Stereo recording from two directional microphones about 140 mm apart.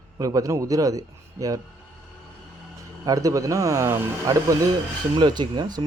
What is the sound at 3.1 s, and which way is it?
Speech, 25° right (ahead or behind).